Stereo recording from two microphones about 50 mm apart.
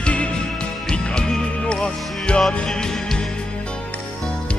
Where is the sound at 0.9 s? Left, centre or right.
Centre.